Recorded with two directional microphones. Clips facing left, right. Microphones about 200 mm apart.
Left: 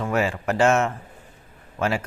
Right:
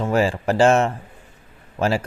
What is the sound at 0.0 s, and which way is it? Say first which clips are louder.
A man's voice: right 4 dB; 30° right (ahead or behind).